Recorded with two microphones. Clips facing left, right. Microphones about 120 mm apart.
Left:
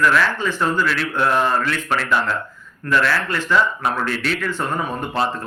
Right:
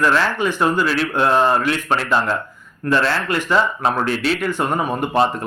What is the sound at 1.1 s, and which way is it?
Speech, 25° right (ahead or behind).